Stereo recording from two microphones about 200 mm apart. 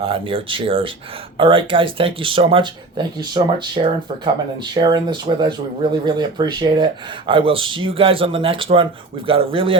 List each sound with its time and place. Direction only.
0.0 s speech: 25° right (ahead or behind)